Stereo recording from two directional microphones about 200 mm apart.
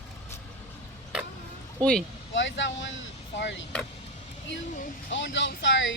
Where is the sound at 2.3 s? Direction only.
65° left (ahead or behind).